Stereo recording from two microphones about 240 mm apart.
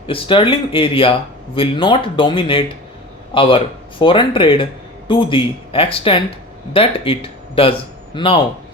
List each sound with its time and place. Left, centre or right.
0.1 s a man's voice: left